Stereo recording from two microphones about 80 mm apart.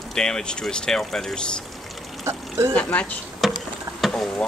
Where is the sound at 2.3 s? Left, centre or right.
Right.